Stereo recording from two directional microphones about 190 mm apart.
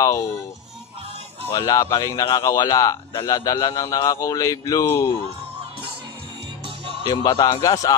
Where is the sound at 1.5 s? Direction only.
20° left (ahead or behind).